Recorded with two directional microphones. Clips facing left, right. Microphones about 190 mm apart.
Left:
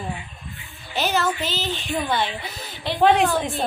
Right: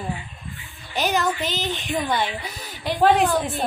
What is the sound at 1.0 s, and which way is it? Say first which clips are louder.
A woman's voice: even; 15° right (ahead or behind).